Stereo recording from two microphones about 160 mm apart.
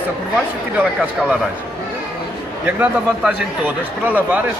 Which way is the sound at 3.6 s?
10° right (ahead or behind).